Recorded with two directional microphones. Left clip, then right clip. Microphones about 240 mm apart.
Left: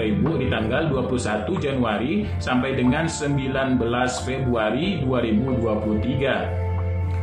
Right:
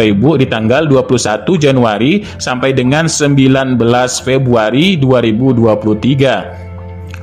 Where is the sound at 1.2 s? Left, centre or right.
Right.